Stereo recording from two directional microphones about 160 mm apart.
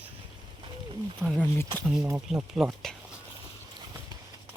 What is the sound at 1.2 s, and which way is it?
Speech, 15° right (ahead or behind).